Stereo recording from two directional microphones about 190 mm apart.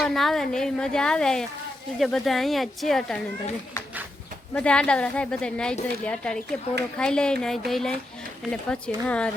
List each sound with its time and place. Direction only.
0.0 s a woman's voice: centre (ahead or behind)
4.5 s a woman's voice: 5° left (ahead or behind)